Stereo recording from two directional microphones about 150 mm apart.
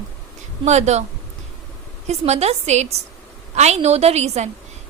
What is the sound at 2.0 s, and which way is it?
A woman's voice, 45° right (ahead or behind).